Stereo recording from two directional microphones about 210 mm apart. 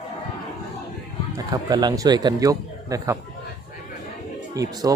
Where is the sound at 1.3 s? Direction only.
15° right (ahead or behind).